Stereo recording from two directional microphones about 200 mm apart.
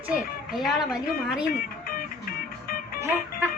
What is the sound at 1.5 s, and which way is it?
Music, 45° left (ahead or behind).